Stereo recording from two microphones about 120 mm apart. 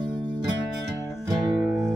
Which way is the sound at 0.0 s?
40° right (ahead or behind).